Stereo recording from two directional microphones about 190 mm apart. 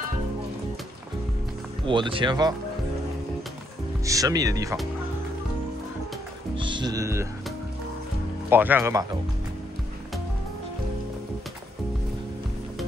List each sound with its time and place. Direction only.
1.9 s speech: 25° right (ahead or behind)
4.0 s speech: 15° right (ahead or behind)
6.5 s speech: 25° right (ahead or behind)
8.5 s speech: 10° right (ahead or behind)